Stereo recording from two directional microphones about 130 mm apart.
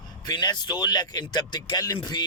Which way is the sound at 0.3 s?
35° left (ahead or behind).